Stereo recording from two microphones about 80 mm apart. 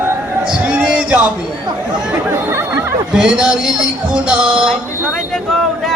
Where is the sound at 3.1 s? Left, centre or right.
Centre.